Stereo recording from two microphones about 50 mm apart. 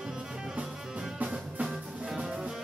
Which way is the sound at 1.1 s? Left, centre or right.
Right.